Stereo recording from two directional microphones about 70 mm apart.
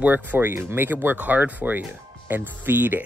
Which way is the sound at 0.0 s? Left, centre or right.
Right.